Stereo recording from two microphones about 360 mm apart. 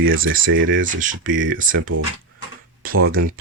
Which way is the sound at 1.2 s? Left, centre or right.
Right.